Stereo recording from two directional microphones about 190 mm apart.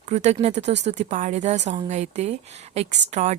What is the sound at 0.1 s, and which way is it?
A woman's voice, 35° right (ahead or behind).